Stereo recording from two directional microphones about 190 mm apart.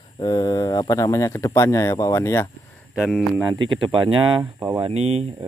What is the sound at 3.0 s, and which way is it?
Speech, centre (ahead or behind).